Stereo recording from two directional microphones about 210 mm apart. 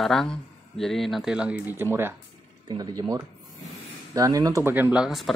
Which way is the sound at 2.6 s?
20° right (ahead or behind).